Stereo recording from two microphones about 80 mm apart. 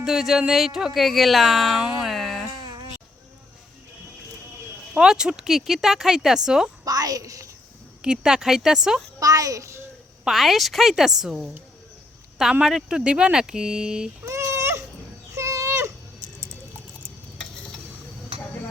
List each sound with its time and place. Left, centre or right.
0.0 s speech: centre
2.0 s a sound: centre
4.9 s speech: centre
6.8 s a child's voice: right
8.0 s speech: centre
9.2 s a child's voice: right
10.2 s speech: centre
14.3 s baby cry: right
15.4 s a sound: right